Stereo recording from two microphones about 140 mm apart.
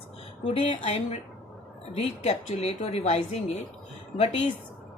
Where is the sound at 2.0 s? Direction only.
45° left (ahead or behind).